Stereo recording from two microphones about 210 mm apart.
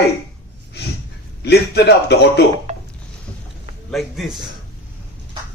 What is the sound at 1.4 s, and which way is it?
Speech, 50° left (ahead or behind).